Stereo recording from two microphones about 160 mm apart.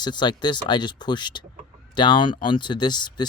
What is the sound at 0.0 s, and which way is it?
Speech, 25° left (ahead or behind).